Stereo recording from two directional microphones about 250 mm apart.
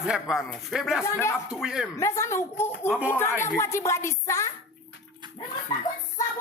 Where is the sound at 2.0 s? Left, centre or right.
Centre.